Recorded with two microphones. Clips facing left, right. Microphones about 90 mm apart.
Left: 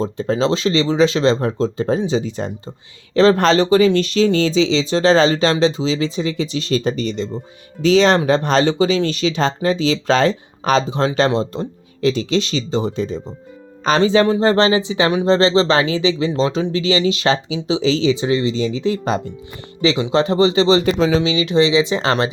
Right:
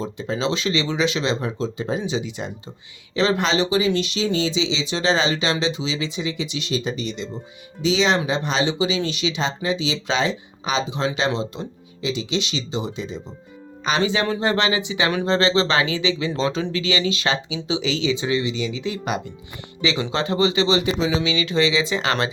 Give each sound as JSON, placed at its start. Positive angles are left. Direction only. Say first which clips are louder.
{"t": 0.0, "sound": "speech", "louder": "left 6 dB", "side_deg": 35}
{"t": 15.1, "sound": "speech", "louder": "left 6 dB", "side_deg": 20}
{"t": 15.4, "sound": "speech", "louder": "left 5 dB", "side_deg": 30}
{"t": 20.8, "sound": "speech", "louder": "left 6 dB", "side_deg": 45}
{"t": 21.2, "sound": "speech", "louder": "left 5 dB", "side_deg": 25}